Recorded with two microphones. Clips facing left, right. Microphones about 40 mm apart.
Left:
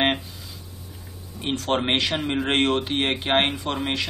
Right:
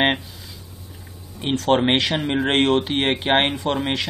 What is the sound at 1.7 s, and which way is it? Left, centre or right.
Speech, centre.